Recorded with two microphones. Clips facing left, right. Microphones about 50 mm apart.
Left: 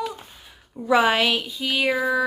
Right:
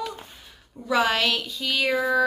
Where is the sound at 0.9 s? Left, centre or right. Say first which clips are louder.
Left 3 dB; left.